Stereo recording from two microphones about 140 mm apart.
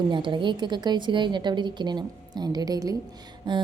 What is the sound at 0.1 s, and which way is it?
A woman's voice, 35° right (ahead or behind).